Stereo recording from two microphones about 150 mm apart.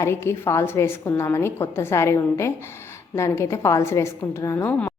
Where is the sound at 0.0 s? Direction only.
15° left (ahead or behind).